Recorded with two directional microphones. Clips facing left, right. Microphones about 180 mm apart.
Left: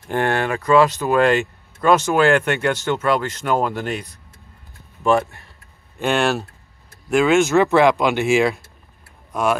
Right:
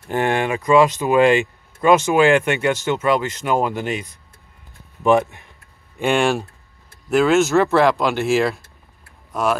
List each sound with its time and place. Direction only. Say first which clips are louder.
0.1 s speech: right 1 dB; 10° right (ahead or behind)